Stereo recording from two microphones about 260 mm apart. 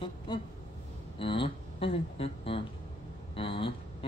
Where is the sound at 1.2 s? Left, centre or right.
Centre.